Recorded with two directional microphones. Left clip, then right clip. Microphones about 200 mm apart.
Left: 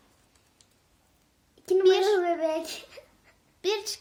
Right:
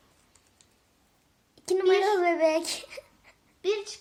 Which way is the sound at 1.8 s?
50° left (ahead or behind).